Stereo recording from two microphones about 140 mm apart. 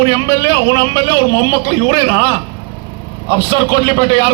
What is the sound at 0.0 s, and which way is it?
A man's voice, 30° right (ahead or behind).